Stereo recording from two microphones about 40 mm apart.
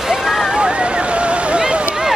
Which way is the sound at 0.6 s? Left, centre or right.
Right.